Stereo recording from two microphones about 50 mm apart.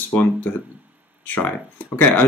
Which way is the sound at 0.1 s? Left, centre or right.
Left.